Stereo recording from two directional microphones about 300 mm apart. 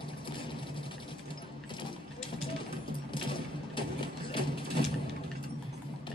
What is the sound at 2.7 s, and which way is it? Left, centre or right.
Sewing machine, centre.